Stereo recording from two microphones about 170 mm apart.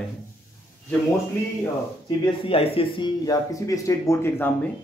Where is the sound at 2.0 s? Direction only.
35° left (ahead or behind); by 4.5 s 15° left (ahead or behind).